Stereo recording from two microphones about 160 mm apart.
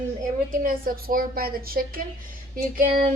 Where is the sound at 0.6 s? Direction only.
65° right (ahead or behind).